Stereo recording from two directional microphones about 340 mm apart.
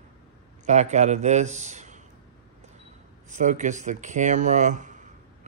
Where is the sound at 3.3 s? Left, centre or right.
Right.